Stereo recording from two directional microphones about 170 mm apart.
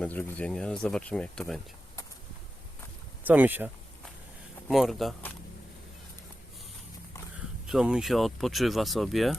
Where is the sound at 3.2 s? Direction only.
10° right (ahead or behind).